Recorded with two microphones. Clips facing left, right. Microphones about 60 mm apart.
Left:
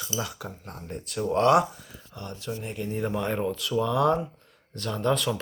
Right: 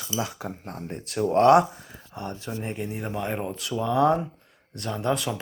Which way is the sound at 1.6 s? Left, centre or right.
Right.